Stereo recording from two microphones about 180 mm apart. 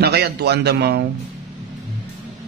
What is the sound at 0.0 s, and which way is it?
A man's voice, 65° right (ahead or behind).